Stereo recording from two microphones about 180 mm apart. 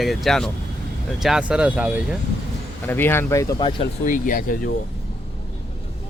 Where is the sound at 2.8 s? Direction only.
10° left (ahead or behind).